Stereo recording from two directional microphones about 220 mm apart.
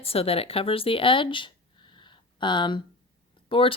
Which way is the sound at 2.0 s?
20° left (ahead or behind).